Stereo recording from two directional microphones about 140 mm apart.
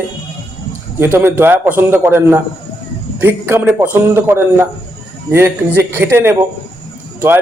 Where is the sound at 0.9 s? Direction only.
15° right (ahead or behind).